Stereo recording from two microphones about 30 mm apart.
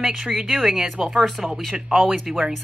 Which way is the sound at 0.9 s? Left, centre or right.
Right.